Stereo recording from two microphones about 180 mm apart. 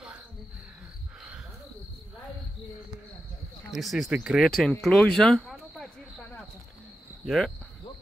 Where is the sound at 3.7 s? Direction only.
Centre (ahead or behind).